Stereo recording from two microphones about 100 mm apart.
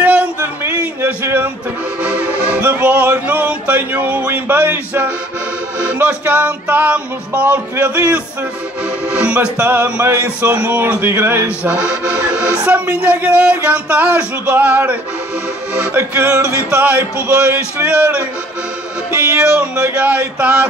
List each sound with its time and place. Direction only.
0.0 s a sound: 15° right (ahead or behind)
2.0 s music: 10° right (ahead or behind)
11.4 s music: 10° right (ahead or behind)
19.3 s music: 10° right (ahead or behind)